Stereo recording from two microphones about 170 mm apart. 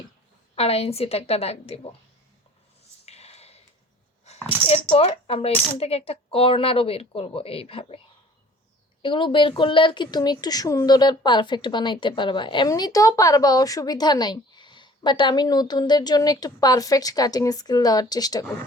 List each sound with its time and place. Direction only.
0.5 s speech: 35° left (ahead or behind)
3.1 s a sound: 40° left (ahead or behind)
4.7 s coin: 35° left (ahead or behind)
5.8 s speech: 35° left (ahead or behind)
9.0 s a woman's voice: 30° left (ahead or behind)